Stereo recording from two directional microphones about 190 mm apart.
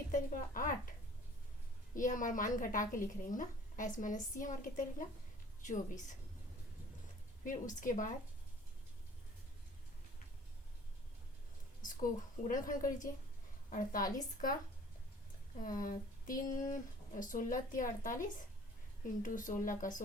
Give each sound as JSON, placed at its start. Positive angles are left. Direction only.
{"t": 0.1, "sound": "a sound", "side_deg": 45}
{"t": 2.0, "sound": "a woman's voice", "side_deg": 45}
{"t": 7.4, "sound": "a woman's voice", "side_deg": 45}
{"t": 11.8, "sound": "a woman's voice", "side_deg": 45}
{"t": 15.6, "sound": "a woman's voice", "side_deg": 45}